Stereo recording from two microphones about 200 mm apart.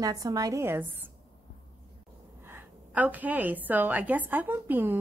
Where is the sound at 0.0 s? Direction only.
15° right (ahead or behind).